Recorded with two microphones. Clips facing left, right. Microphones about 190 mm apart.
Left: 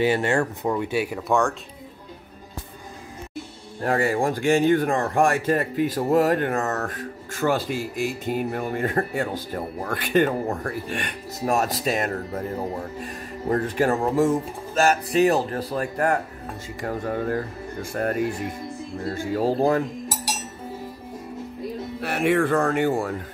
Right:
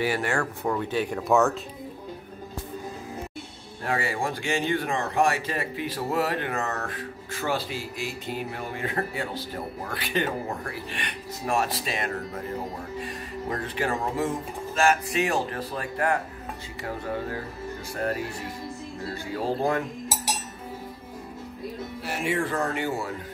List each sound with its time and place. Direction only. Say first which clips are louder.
0.0 s speech: left 5 dB; 25° left (ahead or behind)
3.8 s speech: left 6 dB; 45° left (ahead or behind)
22.0 s speech: left 7 dB; 60° left (ahead or behind)